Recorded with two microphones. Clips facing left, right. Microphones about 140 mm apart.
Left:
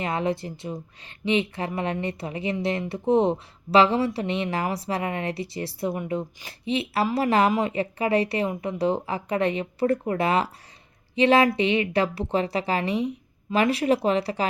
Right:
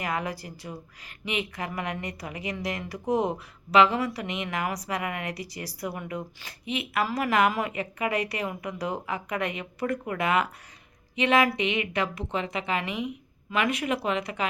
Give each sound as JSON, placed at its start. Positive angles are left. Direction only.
{"t": 0.0, "sound": "speech", "side_deg": 25}